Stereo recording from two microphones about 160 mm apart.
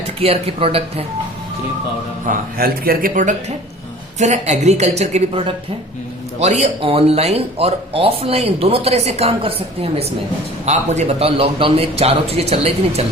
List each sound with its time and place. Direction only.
0.2 s speech: 35° right (ahead or behind)
2.2 s speech: 65° right (ahead or behind)
4.2 s a woman's voice: 45° right (ahead or behind)